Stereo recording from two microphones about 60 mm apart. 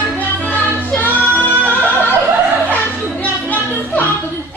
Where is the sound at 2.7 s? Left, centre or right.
Left.